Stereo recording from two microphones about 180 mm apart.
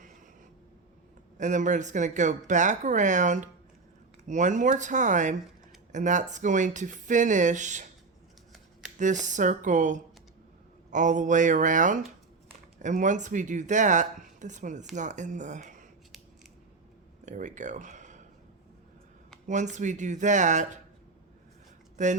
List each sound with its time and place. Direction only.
1.4 s speech: 45° right (ahead or behind)
9.0 s speech: 45° right (ahead or behind)
17.2 s speech: 45° right (ahead or behind)
19.5 s speech: 40° right (ahead or behind)
21.9 s speech: 45° right (ahead or behind)